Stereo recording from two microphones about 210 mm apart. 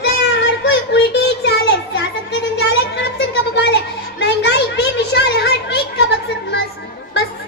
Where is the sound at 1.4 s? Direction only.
55° left (ahead or behind).